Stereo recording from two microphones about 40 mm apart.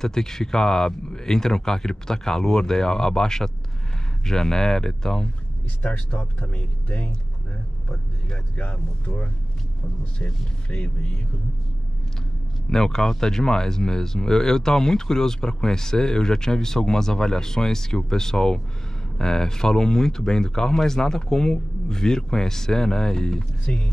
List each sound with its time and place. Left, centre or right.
0.0 s speech: centre
6.0 s speech: left
8.5 s speech: left
12.6 s speech: centre
23.6 s speech: left